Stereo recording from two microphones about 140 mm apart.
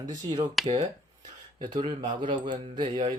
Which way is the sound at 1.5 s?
35° right (ahead or behind).